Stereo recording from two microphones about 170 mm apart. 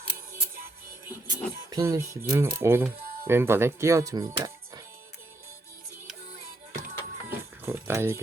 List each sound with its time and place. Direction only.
1.3 s speech: 20° right (ahead or behind)
6.7 s music: 60° right (ahead or behind)
7.6 s a sound: 15° right (ahead or behind)